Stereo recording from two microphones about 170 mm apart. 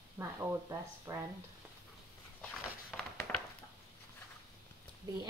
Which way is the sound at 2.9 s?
5° left (ahead or behind).